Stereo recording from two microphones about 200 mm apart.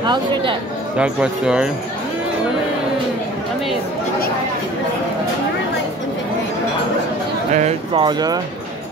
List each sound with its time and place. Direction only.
0.0 s speech: 25° right (ahead or behind)
0.9 s speech: 5° right (ahead or behind)
7.5 s speech: 35° right (ahead or behind)
8.0 s speech: 20° right (ahead or behind)